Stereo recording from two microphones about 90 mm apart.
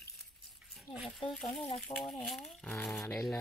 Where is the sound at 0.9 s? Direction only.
5° right (ahead or behind).